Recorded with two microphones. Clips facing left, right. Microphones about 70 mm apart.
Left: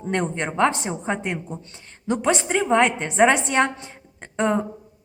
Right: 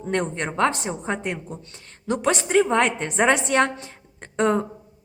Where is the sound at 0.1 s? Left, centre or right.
Centre.